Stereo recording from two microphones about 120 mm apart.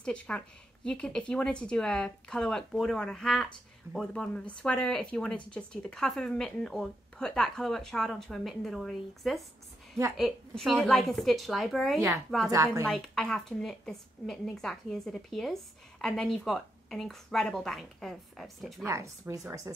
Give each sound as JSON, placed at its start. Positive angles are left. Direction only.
{"t": 0.0, "sound": "a woman's voice", "side_deg": 10}
{"t": 18.9, "sound": "a woman's voice", "side_deg": -25}